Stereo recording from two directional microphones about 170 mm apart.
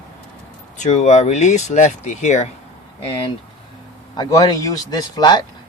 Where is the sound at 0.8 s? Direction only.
45° left (ahead or behind).